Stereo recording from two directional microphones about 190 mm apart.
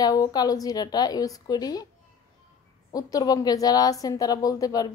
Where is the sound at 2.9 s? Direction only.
20° left (ahead or behind).